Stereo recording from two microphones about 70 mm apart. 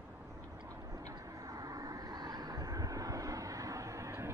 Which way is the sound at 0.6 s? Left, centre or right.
Right.